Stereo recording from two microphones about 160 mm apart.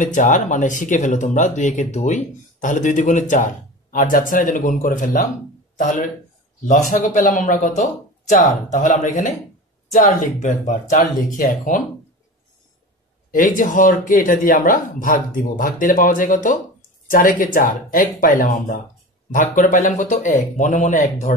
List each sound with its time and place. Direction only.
0.0 s speech: 55° left (ahead or behind)
13.3 s speech: 60° left (ahead or behind)